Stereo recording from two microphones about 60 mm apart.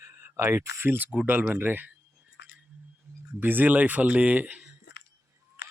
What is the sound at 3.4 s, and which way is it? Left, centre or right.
Speech, right.